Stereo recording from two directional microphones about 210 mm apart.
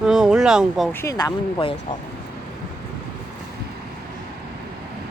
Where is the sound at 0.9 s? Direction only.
15° left (ahead or behind).